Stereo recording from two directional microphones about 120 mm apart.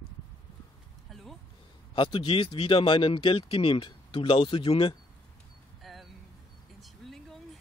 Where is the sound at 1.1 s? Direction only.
Centre (ahead or behind).